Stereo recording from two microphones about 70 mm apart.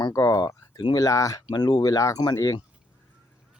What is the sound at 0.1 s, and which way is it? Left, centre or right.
Speech, left.